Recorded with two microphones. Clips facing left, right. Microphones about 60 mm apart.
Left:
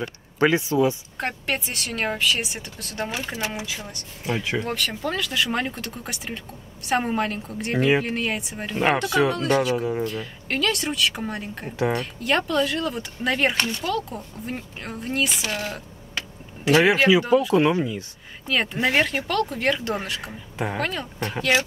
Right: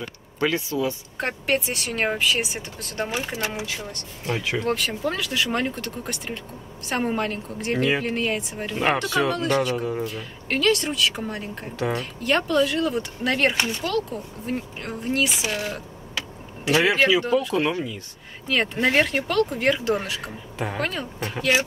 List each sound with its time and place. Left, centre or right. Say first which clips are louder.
0.4 s speech: left 4 dB; left
1.1 s speech: right 3 dB; centre
4.7 s speech: right 1 dB; centre
16.8 s speech: right 1 dB; centre
17.6 s speech: left 4 dB; centre
18.5 s speech: right 1 dB; centre